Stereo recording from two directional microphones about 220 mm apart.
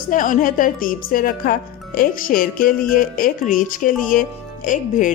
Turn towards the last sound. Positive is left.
turn(degrees=35)  # may be behind; listen again after turning